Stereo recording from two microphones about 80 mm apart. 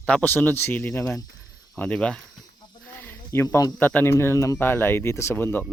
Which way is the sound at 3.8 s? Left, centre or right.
Left.